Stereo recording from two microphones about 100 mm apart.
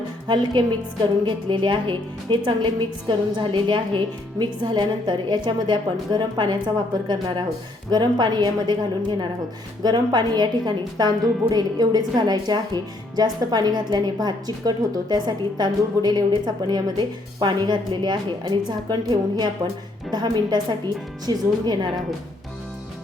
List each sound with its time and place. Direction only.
1.2 s a woman's voice: 50° right (ahead or behind)